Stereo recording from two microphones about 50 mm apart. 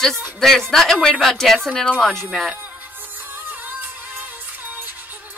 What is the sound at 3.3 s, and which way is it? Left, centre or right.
Music, right.